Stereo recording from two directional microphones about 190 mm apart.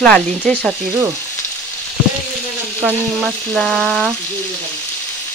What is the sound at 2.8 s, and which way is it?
Speech, centre (ahead or behind).